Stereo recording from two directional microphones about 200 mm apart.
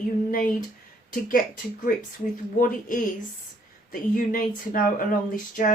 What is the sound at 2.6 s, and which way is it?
Speech, 45° left (ahead or behind).